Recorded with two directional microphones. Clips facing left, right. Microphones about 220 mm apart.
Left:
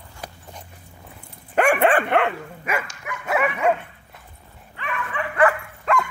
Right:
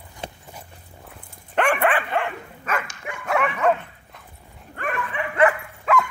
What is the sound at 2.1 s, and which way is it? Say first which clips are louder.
Dog: left 5 dB; 65° left (ahead or behind).